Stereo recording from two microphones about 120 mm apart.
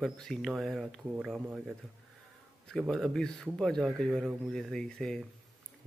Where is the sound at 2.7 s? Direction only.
5° left (ahead or behind).